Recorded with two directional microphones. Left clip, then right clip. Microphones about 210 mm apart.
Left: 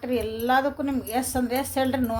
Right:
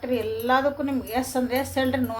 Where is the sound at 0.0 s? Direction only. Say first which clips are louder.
Right 1 dB; 55° left (ahead or behind).